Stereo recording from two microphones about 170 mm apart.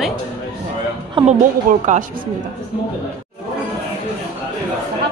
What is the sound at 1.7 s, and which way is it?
Speech, 50° right (ahead or behind).